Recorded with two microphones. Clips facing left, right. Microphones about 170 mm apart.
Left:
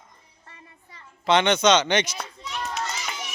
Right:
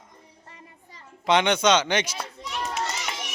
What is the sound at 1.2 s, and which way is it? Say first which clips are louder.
Speech: left 1 dB; 10° right (ahead or behind).